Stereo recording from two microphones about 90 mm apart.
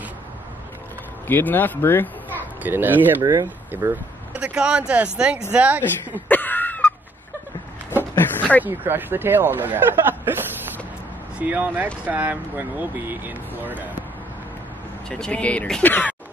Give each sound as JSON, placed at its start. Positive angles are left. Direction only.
{"t": 1.2, "sound": "speech", "side_deg": 20}
{"t": 2.6, "sound": "speech", "side_deg": -20}
{"t": 3.2, "sound": "speech", "side_deg": -55}
{"t": 3.7, "sound": "speech", "side_deg": -25}
{"t": 4.3, "sound": "speech", "side_deg": -10}
{"t": 6.2, "sound": "a sound", "side_deg": 20}
{"t": 8.4, "sound": "a sound", "side_deg": 15}
{"t": 8.6, "sound": "speech", "side_deg": -20}
{"t": 15.0, "sound": "speech", "side_deg": 10}